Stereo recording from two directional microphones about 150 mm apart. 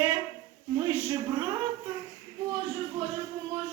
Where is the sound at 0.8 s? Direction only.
15° right (ahead or behind).